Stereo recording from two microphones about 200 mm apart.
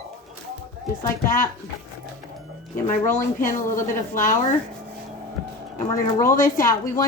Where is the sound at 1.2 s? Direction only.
45° left (ahead or behind).